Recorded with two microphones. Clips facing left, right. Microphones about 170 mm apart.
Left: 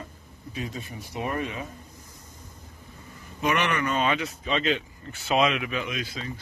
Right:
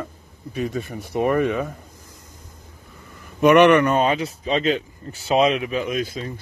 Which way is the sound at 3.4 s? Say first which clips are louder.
Right 13 dB; 60° right (ahead or behind).